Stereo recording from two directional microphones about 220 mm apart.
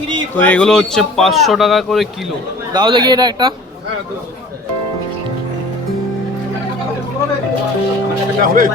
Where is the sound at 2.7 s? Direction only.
20° right (ahead or behind).